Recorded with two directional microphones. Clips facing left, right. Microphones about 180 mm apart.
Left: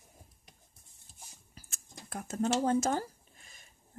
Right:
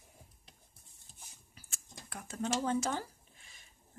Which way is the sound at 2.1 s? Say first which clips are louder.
Left 5 dB; 45° left (ahead or behind).